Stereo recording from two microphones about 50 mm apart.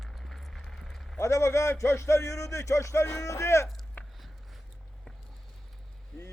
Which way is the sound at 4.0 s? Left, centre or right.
Left.